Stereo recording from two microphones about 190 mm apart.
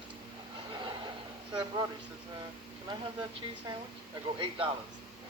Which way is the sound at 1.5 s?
20° right (ahead or behind).